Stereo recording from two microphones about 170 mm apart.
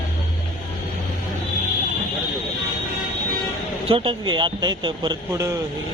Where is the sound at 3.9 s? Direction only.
30° right (ahead or behind).